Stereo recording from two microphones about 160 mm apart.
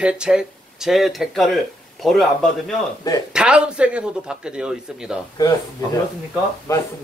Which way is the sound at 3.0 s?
25° left (ahead or behind).